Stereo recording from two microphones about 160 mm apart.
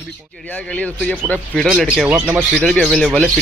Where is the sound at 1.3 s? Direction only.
5° left (ahead or behind).